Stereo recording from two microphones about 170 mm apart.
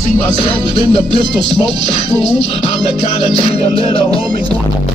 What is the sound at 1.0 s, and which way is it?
Music, 25° right (ahead or behind).